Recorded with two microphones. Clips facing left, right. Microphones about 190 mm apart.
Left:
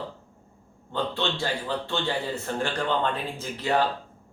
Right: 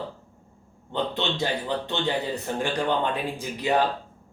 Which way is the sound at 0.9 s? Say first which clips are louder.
Right 1 dB; 20° right (ahead or behind).